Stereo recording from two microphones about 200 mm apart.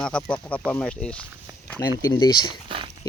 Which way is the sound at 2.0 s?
20° left (ahead or behind).